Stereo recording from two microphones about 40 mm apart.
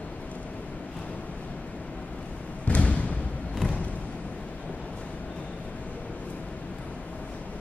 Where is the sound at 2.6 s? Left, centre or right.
Left.